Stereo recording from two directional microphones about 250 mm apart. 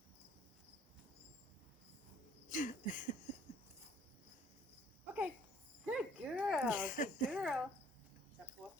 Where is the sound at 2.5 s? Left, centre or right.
Left.